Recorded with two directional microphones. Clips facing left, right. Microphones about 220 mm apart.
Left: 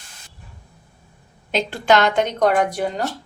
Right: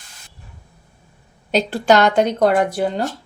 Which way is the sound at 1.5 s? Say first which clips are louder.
Right 3 dB; 40° right (ahead or behind).